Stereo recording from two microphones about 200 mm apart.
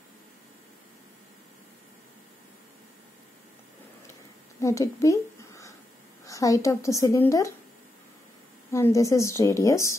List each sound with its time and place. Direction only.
4.6 s a sound: 15° left (ahead or behind)
6.2 s a woman's voice: 15° left (ahead or behind)
8.7 s a woman's voice: 15° left (ahead or behind)